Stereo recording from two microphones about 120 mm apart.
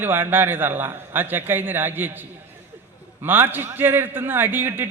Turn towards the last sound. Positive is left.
turn(degrees=-15)  # may be behind; listen again after turning